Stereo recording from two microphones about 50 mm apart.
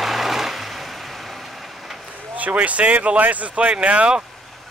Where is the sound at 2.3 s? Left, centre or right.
Right.